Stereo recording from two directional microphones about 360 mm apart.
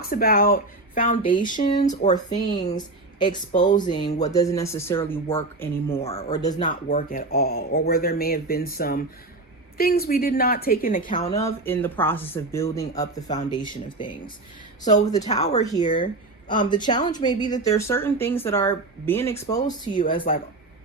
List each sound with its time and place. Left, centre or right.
0.0 s speech: left; by 6.0 s centre
6.0 s speech: centre
6.7 s speech: left
11.3 s speech: centre
20.0 s speech: left